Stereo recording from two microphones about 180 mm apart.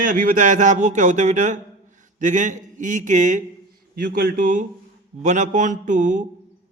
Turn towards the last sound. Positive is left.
turn(degrees=-45)  # may be behind; listen again after turning